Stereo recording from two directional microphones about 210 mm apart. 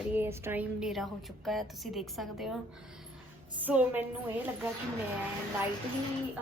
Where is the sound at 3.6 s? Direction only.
10° right (ahead or behind).